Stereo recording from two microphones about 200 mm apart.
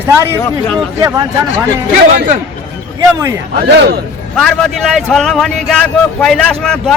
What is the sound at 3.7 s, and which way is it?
Speech, 55° right (ahead or behind).